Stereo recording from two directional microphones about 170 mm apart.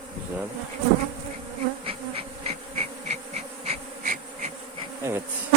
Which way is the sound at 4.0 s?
50° right (ahead or behind).